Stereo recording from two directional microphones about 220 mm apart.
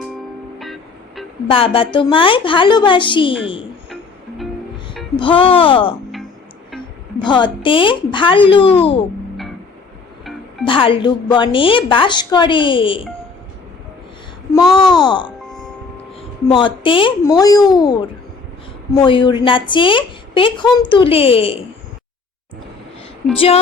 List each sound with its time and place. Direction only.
0.6 s music: centre (ahead or behind)
1.5 s a woman's voice: 25° left (ahead or behind)
5.1 s a woman's voice: 25° left (ahead or behind)
7.2 s a woman's voice: 20° left (ahead or behind)
10.7 s a woman's voice: 25° left (ahead or behind)
14.5 s a woman's voice: 20° left (ahead or behind)
16.5 s a woman's voice: 20° left (ahead or behind)